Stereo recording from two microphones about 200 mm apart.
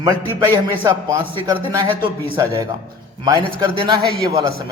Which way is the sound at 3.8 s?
20° right (ahead or behind).